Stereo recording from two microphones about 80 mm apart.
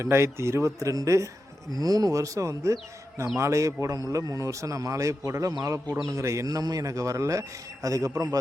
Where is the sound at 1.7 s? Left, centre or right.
Right.